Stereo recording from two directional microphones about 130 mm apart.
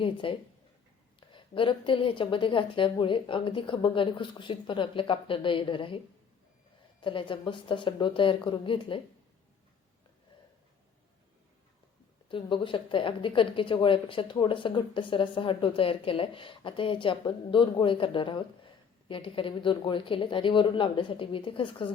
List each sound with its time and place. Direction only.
0.0 s a woman's voice: 40° left (ahead or behind)
7.0 s a woman's voice: 40° left (ahead or behind)
12.3 s a woman's voice: 40° left (ahead or behind)